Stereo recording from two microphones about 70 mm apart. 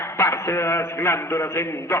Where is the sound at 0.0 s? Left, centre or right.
Left.